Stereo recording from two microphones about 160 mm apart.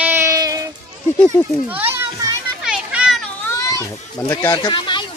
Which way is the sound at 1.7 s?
10° right (ahead or behind).